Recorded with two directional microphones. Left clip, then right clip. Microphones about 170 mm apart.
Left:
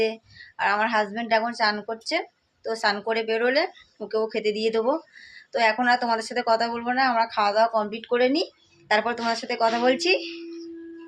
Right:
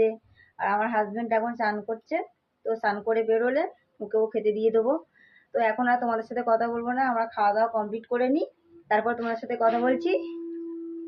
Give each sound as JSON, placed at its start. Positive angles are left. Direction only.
{"t": 0.0, "sound": "speech", "side_deg": 10}